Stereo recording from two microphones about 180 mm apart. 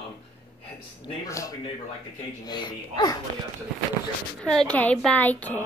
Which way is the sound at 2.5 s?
25° left (ahead or behind).